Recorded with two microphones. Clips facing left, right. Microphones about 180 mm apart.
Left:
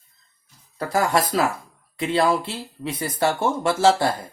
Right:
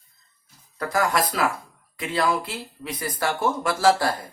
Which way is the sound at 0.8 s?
25° left (ahead or behind).